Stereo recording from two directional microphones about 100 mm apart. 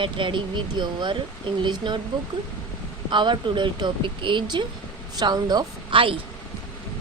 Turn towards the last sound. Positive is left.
turn(degrees=-60)  # may be behind; listen again after turning